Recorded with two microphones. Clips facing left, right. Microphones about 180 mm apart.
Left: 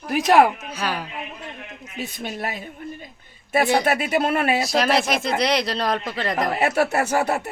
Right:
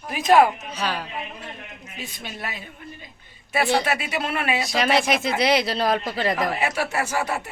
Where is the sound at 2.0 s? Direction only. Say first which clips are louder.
Left 6 dB; 50° left (ahead or behind).